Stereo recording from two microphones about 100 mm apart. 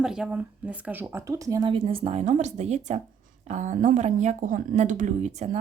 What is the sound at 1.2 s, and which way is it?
Speech, 35° right (ahead or behind).